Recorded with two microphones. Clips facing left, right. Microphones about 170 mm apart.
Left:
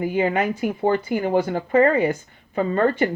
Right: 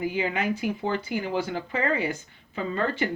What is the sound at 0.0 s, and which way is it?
Speech, 50° left (ahead or behind).